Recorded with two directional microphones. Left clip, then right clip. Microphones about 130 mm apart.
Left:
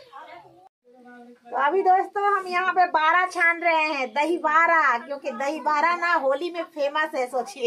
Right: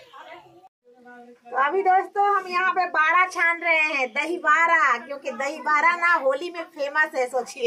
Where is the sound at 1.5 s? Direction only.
20° left (ahead or behind).